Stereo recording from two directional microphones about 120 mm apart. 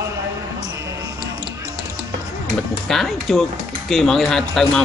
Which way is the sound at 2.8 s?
Centre (ahead or behind).